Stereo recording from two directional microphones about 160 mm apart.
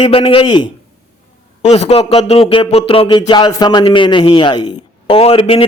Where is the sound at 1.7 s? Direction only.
40° left (ahead or behind).